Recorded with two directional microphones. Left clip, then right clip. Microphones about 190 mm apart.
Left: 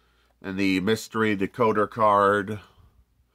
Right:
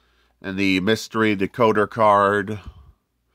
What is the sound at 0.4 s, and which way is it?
Speech, 25° right (ahead or behind).